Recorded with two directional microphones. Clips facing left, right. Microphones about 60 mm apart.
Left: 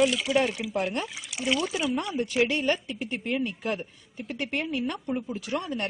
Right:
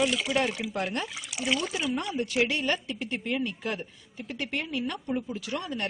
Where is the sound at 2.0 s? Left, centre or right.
Left.